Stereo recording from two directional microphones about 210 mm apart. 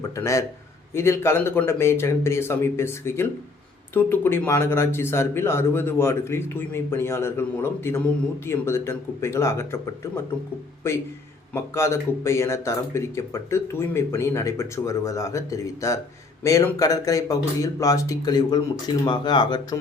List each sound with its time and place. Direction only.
0.2 s speech: 15° left (ahead or behind)
11.5 s speech: 15° left (ahead or behind)